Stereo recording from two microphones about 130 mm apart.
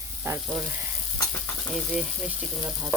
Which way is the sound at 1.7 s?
Centre (ahead or behind).